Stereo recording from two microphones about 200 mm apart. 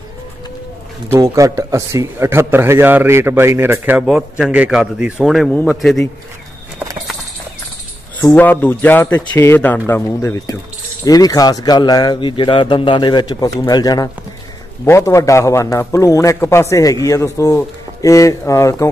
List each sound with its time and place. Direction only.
1.0 s a man's voice: 15° right (ahead or behind)
8.4 s a man's voice: 10° left (ahead or behind)